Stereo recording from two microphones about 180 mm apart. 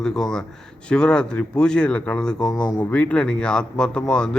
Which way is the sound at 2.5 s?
20° left (ahead or behind).